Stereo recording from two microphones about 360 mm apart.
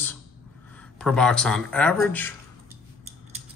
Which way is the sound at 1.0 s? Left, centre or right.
Centre.